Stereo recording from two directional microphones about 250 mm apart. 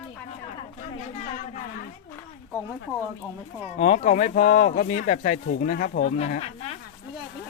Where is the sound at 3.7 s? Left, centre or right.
Left.